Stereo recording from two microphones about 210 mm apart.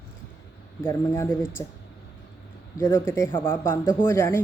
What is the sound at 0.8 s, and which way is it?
Speech, 10° left (ahead or behind).